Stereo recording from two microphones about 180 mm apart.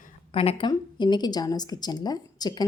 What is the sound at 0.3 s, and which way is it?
A woman's voice, 30° left (ahead or behind).